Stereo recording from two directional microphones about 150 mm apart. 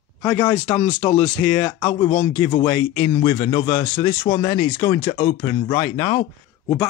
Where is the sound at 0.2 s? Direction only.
15° left (ahead or behind).